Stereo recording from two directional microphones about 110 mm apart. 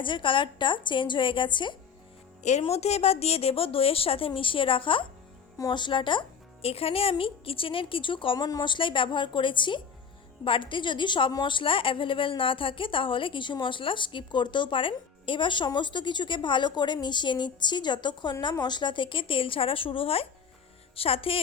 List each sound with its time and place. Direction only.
0.0 s speech: 50° left (ahead or behind)
2.4 s a woman's voice: 90° left; by 5.0 s 55° left (ahead or behind)
5.5 s speech: 40° left (ahead or behind)
8.4 s speech: 35° left (ahead or behind); by 21.3 s 60° left (ahead or behind)